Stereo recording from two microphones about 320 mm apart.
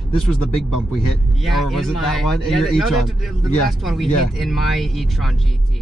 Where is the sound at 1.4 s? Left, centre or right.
Centre.